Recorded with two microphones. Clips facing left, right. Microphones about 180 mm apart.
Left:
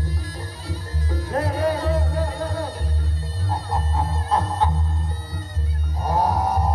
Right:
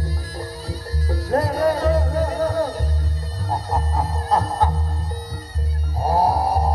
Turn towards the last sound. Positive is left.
turn(degrees=-35)  # may be behind; listen again after turning